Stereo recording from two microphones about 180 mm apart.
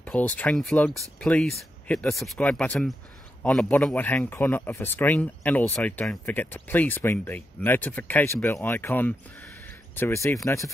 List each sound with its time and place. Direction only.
0.0 s speech: 10° left (ahead or behind)